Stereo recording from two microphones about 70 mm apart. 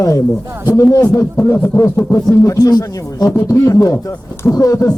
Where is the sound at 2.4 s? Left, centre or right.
Left.